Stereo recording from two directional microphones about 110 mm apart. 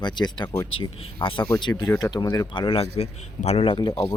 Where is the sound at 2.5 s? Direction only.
50° left (ahead or behind).